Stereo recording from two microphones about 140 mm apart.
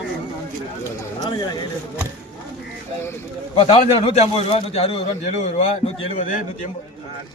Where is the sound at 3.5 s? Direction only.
45° left (ahead or behind).